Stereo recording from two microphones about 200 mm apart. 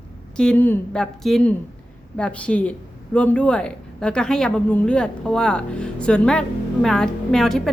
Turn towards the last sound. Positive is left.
turn(degrees=0)  # may be behind; listen again after turning